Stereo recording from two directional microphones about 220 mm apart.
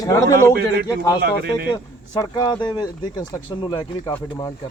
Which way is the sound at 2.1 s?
20° left (ahead or behind).